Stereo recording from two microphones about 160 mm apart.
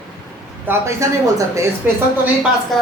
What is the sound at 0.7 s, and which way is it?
Speech, 20° right (ahead or behind).